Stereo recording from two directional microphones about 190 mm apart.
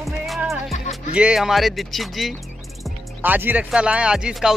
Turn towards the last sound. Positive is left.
turn(degrees=-5)  # may be behind; listen again after turning